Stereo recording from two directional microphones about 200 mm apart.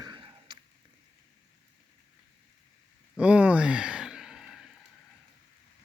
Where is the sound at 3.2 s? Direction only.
5° right (ahead or behind).